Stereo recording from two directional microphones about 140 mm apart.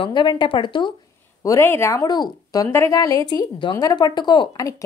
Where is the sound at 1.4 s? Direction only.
20° left (ahead or behind).